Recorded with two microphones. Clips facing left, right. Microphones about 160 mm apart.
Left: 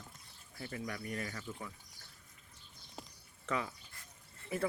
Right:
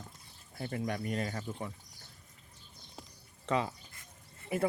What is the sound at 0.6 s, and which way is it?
Speech, 40° right (ahead or behind).